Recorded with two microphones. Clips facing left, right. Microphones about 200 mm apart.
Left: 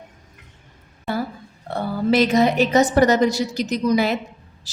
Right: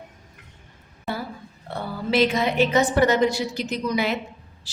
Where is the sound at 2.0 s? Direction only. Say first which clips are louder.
Left 4 dB; 40° left (ahead or behind).